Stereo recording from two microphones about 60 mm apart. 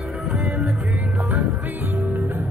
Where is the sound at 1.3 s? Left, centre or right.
Right.